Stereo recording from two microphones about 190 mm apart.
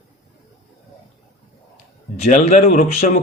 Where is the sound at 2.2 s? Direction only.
40° left (ahead or behind).